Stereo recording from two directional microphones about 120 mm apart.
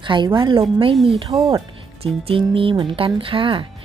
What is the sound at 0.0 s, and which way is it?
Speech, 40° right (ahead or behind).